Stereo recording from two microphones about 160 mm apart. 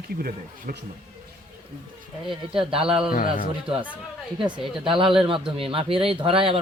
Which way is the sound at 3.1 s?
60° left (ahead or behind).